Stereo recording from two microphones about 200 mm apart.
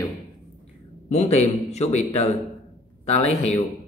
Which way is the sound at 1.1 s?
35° left (ahead or behind).